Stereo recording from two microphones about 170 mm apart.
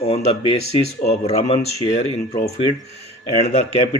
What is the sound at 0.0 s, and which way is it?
A man's voice, 35° left (ahead or behind).